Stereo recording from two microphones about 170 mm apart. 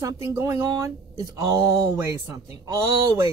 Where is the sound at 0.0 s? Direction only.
20° right (ahead or behind).